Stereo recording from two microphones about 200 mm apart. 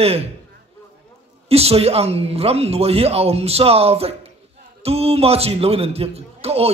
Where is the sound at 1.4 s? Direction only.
30° right (ahead or behind).